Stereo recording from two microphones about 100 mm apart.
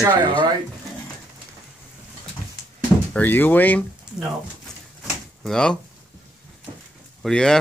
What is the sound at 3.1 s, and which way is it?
Speech, 20° left (ahead or behind).